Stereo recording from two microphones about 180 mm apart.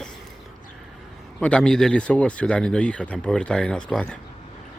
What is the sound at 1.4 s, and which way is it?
Speech, 5° left (ahead or behind).